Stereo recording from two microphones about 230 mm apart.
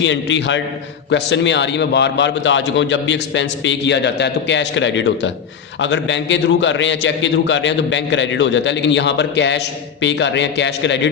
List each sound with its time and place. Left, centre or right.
0.0 s a man's voice: left